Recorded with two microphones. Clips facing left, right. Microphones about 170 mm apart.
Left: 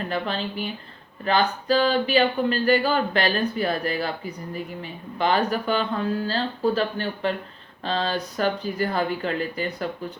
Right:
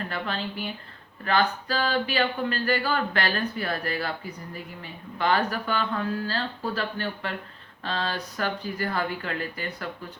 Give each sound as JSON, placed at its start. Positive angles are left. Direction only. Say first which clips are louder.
{"t": 0.0, "sound": "speech", "louder": "left 4 dB", "side_deg": 20}